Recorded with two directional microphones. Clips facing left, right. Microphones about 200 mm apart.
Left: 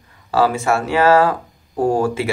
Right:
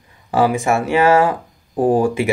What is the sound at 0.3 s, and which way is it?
Speech, 15° right (ahead or behind).